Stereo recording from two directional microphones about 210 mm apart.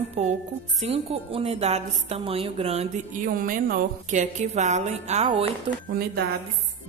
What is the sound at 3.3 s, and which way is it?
A woman's voice, 40° right (ahead or behind).